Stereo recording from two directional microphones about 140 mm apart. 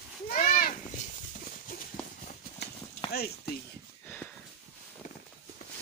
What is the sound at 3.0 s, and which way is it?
Clip-clop, 40° left (ahead or behind).